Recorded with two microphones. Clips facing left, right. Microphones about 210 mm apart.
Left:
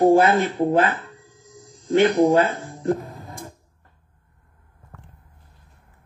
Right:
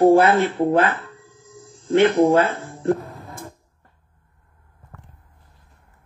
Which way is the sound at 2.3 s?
Centre (ahead or behind).